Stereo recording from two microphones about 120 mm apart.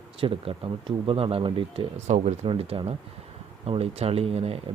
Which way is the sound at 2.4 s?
50° right (ahead or behind).